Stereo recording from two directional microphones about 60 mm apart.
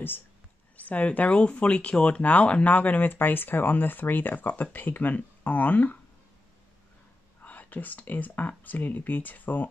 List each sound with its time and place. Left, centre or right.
0.7 s speech: left
7.4 s speech: left